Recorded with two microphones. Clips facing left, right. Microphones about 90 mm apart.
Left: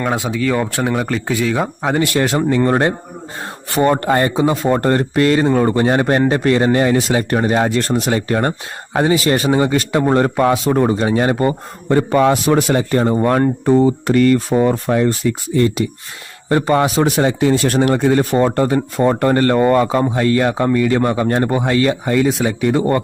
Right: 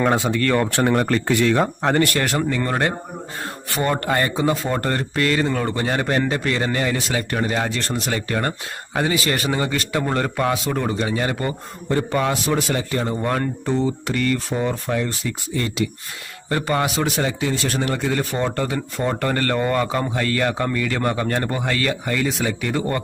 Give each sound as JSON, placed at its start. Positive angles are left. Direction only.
{"t": 0.0, "sound": "speech", "side_deg": 0}
{"t": 2.1, "sound": "a man's voice", "side_deg": 20}
{"t": 7.3, "sound": "speech", "side_deg": 40}
{"t": 8.1, "sound": "a man's voice", "side_deg": 25}
{"t": 9.5, "sound": "a man's voice", "side_deg": 25}
{"t": 12.1, "sound": "speech", "side_deg": 45}
{"t": 12.7, "sound": "speech", "side_deg": 40}
{"t": 15.5, "sound": "speech", "side_deg": 35}
{"t": 17.4, "sound": "speech", "side_deg": 45}
{"t": 17.9, "sound": "a man's voice", "side_deg": 30}